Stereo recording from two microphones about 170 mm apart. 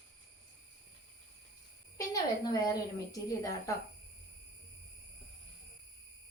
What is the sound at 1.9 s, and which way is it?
A woman's voice, 20° left (ahead or behind).